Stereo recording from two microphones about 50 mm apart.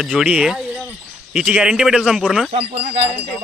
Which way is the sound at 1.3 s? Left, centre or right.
Centre.